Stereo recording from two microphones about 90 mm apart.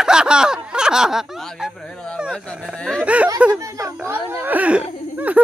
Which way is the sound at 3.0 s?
15° right (ahead or behind).